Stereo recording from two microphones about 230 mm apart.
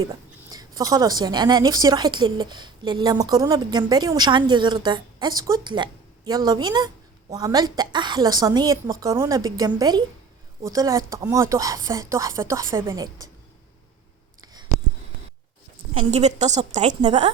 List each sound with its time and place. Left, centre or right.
0.1 s a woman's voice: centre
14.4 s a sound: centre
16.1 s a woman's voice: right